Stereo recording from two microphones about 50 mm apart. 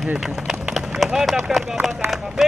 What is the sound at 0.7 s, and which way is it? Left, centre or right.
Run, centre.